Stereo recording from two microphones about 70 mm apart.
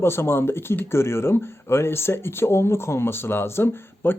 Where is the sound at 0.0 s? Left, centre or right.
Left.